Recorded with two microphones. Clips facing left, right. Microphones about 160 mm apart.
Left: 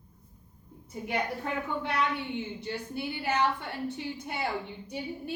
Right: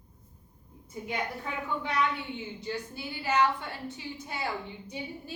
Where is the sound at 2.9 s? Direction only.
60° left (ahead or behind).